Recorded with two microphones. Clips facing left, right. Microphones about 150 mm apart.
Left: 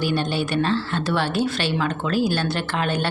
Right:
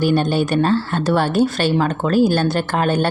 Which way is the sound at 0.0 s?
45° right (ahead or behind).